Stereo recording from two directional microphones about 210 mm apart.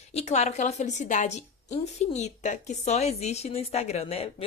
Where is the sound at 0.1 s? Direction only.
30° left (ahead or behind).